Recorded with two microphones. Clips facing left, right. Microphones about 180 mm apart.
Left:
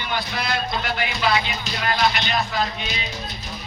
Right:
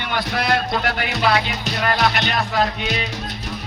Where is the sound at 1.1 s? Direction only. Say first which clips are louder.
Right 3 dB; 75° right (ahead or behind).